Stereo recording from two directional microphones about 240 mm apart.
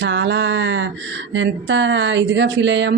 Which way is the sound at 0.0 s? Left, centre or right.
Right.